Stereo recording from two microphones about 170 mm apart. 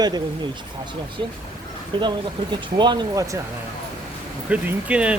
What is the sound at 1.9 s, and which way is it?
Speech, 30° right (ahead or behind).